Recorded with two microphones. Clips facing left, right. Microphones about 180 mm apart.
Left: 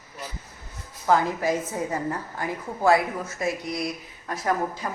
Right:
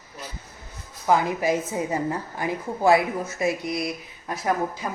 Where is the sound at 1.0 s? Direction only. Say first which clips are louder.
Right 1 dB; 15° right (ahead or behind).